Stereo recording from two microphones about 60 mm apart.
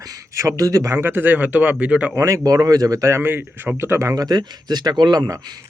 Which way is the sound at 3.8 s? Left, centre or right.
Right.